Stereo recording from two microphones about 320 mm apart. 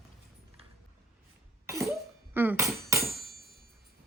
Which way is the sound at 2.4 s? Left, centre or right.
Centre.